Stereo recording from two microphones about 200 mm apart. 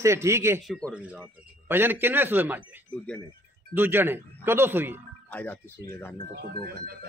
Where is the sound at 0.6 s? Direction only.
Centre (ahead or behind).